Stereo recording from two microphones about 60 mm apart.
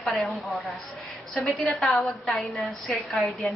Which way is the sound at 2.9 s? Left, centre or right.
Centre.